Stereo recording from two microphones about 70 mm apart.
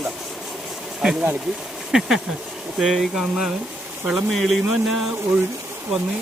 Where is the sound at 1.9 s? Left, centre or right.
Centre.